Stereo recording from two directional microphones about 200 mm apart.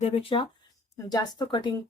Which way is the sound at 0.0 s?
30° left (ahead or behind).